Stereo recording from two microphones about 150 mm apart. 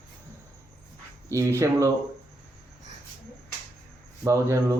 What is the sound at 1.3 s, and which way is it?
Speech, 20° right (ahead or behind).